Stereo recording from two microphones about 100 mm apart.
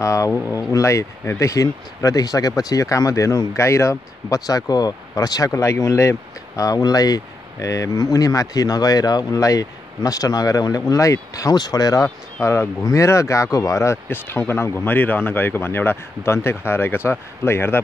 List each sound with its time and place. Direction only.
0.0 s speech: 30° left (ahead or behind)
12.4 s speech: 25° left (ahead or behind)